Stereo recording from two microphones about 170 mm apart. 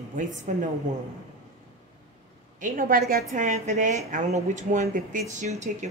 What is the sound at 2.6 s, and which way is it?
Speech, 55° right (ahead or behind).